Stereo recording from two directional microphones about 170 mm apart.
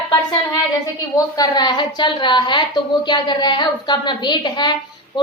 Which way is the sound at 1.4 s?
25° left (ahead or behind).